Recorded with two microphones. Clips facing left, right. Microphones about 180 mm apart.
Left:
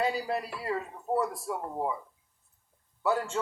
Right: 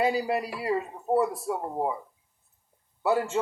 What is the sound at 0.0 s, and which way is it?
A man's voice, 10° right (ahead or behind).